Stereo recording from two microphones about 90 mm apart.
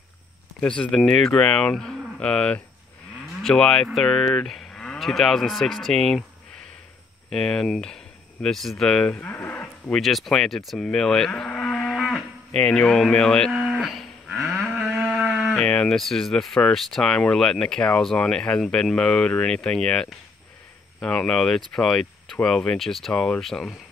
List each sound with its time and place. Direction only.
0.6 s speech: 10° left (ahead or behind)
7.2 s speech: 10° left (ahead or behind)
9.1 s speech: 20° left (ahead or behind)
9.9 s speech: centre (ahead or behind)
11.9 s cattle: 5° left (ahead or behind)
13.5 s cattle: 5° right (ahead or behind)
15.6 s speech: 10° left (ahead or behind)